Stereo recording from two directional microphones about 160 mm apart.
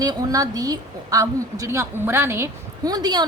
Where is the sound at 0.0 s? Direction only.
25° right (ahead or behind).